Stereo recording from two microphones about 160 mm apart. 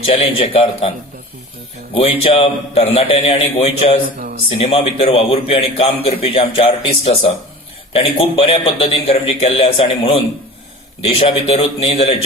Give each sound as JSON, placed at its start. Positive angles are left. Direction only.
{"t": 0.1, "sound": "a man's voice", "side_deg": 35}
{"t": 4.2, "sound": "a sound", "side_deg": -90}
{"t": 4.6, "sound": "a man's voice", "side_deg": 40}